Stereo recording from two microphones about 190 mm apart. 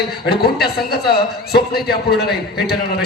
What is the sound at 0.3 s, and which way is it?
A man's voice, 55° left (ahead or behind).